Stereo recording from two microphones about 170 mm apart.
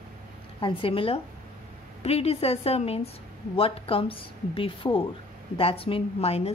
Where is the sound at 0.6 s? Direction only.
30° left (ahead or behind).